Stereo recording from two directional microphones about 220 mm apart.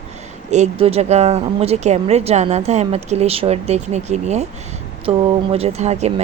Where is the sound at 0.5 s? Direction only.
30° right (ahead or behind).